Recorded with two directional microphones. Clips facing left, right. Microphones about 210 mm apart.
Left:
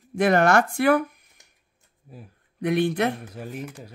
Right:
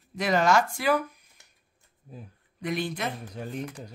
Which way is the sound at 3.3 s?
5° left (ahead or behind).